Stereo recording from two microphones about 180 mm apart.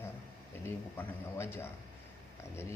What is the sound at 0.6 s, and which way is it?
A man's voice, 15° left (ahead or behind).